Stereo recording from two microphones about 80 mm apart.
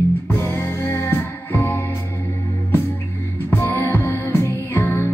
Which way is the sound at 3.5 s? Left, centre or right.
Left.